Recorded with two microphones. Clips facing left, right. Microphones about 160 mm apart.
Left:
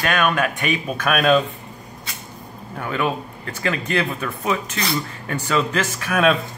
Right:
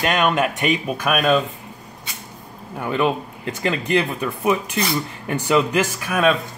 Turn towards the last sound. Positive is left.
turn(degrees=-5)  # may be behind; listen again after turning